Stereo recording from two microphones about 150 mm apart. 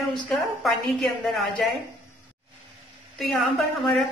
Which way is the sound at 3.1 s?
Centre (ahead or behind).